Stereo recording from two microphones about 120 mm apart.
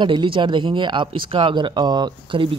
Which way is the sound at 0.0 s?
40° right (ahead or behind).